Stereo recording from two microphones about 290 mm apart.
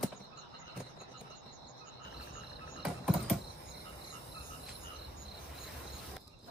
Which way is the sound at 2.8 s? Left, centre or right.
Centre.